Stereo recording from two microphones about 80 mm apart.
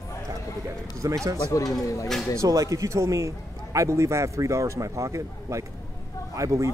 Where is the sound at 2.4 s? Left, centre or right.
Right.